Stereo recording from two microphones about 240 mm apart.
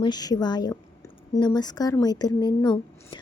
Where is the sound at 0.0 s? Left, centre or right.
Centre.